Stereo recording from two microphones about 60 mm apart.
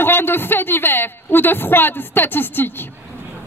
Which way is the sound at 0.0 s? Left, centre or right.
Left.